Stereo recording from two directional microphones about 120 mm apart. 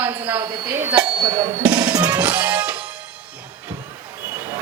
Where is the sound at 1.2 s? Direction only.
30° right (ahead or behind).